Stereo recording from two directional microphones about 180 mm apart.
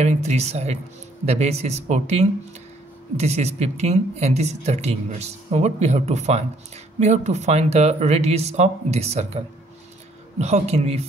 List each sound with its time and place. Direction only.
0.0 s speech: 40° right (ahead or behind)
10.4 s speech: 35° right (ahead or behind)